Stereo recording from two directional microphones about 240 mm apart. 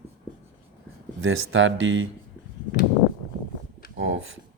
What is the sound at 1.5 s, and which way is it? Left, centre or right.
Speech, right.